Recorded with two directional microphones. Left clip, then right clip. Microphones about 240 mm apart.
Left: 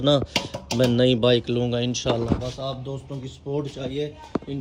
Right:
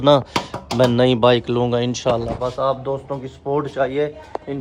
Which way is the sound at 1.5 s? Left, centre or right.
Right.